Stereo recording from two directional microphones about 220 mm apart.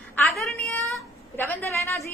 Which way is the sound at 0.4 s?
5° left (ahead or behind).